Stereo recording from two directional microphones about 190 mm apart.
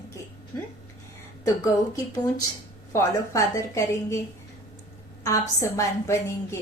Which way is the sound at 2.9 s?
15° left (ahead or behind).